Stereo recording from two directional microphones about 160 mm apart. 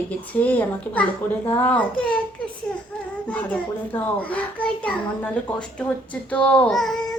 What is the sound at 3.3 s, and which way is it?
A child's voice, 10° left (ahead or behind).